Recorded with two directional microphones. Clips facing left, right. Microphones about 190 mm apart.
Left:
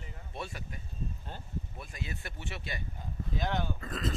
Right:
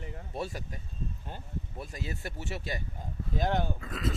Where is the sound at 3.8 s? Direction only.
5° right (ahead or behind).